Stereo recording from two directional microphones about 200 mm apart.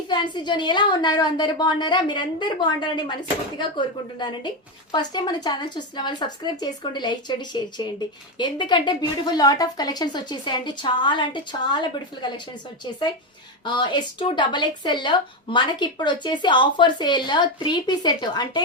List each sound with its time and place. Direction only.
0.1 s speech: 20° left (ahead or behind)
13.7 s speech: 20° left (ahead or behind)